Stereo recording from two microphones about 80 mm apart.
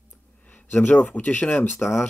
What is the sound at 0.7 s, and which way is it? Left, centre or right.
Speech, left.